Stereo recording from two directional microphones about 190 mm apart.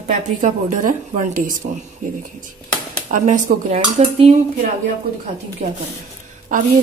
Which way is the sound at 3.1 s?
40° right (ahead or behind).